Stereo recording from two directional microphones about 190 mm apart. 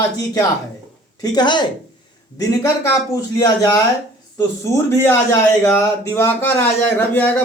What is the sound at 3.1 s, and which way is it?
A man's voice, 20° left (ahead or behind).